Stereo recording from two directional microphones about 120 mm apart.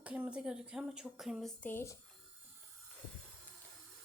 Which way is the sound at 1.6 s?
20° left (ahead or behind).